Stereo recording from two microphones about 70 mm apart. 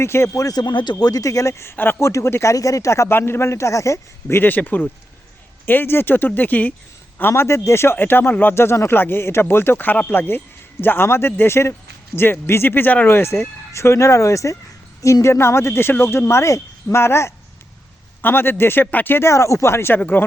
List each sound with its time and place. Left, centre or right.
0.0 s a man's voice: left
0.5 s a man's voice: left
1.7 s a man's voice: left
4.4 s speech: left
7.2 s speech: left
13.1 s speech: left
19.3 s speech: left
20.0 s speech: left